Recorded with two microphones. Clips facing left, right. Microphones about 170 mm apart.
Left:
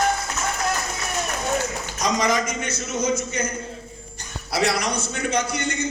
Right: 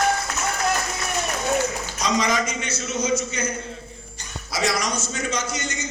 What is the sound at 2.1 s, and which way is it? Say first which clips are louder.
Speech: even; 50° left (ahead or behind).